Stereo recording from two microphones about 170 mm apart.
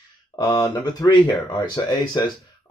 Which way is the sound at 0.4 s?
25° left (ahead or behind).